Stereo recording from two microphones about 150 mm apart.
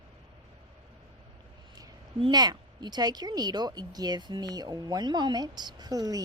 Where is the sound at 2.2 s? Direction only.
30° right (ahead or behind).